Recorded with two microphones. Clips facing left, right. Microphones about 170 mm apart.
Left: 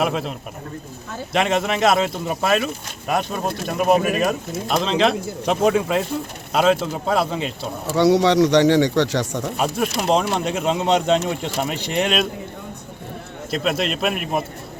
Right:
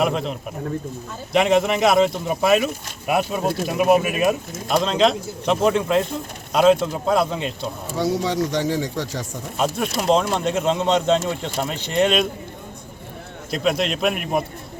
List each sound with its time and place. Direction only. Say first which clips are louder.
0.0 s speech: right 1 dB; centre (ahead or behind)
7.9 s speech: left 7 dB; 75° left (ahead or behind)
9.6 s speech: right 1 dB; 5° left (ahead or behind)
13.5 s speech: right 1 dB; centre (ahead or behind)